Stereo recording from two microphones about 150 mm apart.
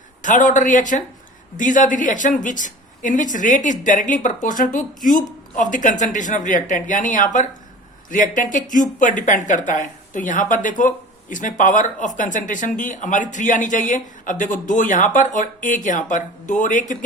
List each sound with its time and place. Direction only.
0.2 s speech: 60° left (ahead or behind)